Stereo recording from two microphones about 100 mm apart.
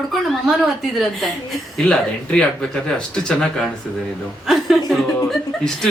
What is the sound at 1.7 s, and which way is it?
Speech, 10° left (ahead or behind).